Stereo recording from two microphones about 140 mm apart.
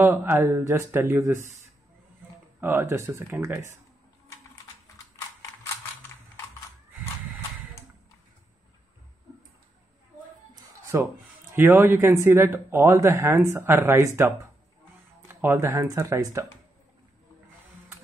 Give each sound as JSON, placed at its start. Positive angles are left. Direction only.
{"t": 0.0, "sound": "speech", "side_deg": -15}
{"t": 2.6, "sound": "speech", "side_deg": -15}
{"t": 5.1, "sound": "mechanisms", "side_deg": 25}
{"t": 10.5, "sound": "a sound", "side_deg": -20}
{"t": 11.5, "sound": "speech", "side_deg": -20}